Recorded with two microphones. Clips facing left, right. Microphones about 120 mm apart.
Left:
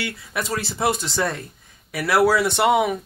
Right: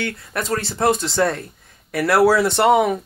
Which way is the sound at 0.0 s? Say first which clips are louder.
Right 2 dB; 5° left (ahead or behind).